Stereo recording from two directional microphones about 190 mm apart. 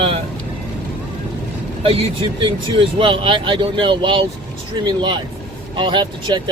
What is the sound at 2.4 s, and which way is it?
Speech, 25° right (ahead or behind).